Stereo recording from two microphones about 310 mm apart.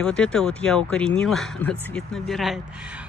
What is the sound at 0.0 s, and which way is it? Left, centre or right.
Speech, centre.